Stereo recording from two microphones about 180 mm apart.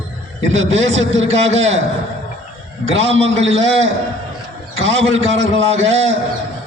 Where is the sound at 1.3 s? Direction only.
40° right (ahead or behind).